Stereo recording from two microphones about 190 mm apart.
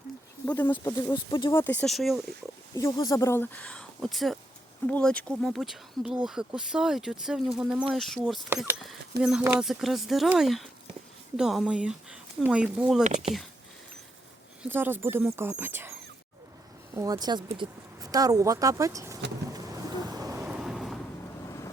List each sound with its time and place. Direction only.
0.4 s speech: 10° left (ahead or behind)
1.5 s speech: 10° left (ahead or behind)
2.7 s speech: 20° left (ahead or behind); by 8.4 s centre (ahead or behind)
8.4 s speech: 10° right (ahead or behind)
13.1 s speech: 40° right (ahead or behind)
14.6 s speech: 10° right (ahead or behind)
19.5 s vehicle: 20° right (ahead or behind)
20.4 s vehicle: centre (ahead or behind)
21.4 s vehicle: 15° left (ahead or behind)